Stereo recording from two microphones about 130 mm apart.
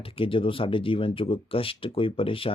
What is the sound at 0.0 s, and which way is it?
Speech, 45° left (ahead or behind).